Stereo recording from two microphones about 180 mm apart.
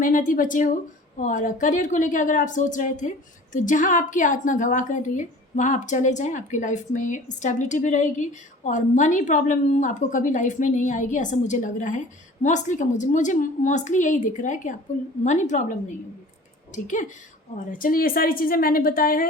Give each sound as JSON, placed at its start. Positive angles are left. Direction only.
{"t": 0.0, "sound": "a woman's voice", "side_deg": 50}
{"t": 16.7, "sound": "a woman's voice", "side_deg": 45}